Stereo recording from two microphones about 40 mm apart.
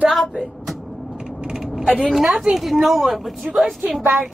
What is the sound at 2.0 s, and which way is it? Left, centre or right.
Speech, centre.